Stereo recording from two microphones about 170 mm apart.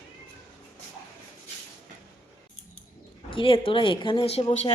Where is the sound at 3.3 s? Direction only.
30° left (ahead or behind).